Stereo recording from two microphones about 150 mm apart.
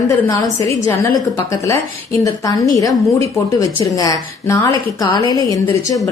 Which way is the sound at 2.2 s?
25° left (ahead or behind).